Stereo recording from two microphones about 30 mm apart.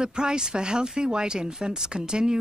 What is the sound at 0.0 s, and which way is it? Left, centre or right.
Speech, right.